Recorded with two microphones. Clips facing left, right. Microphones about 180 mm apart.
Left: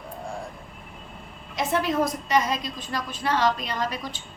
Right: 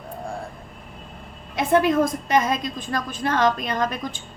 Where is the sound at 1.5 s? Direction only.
55° right (ahead or behind).